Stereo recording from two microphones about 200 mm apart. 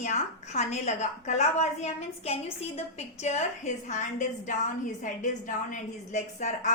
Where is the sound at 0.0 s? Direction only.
35° left (ahead or behind).